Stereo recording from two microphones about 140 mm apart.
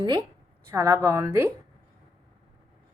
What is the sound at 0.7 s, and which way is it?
Speech, 25° right (ahead or behind).